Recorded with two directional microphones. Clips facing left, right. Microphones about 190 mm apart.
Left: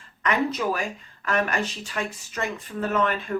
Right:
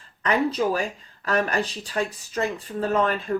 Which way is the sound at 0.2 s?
35° right (ahead or behind).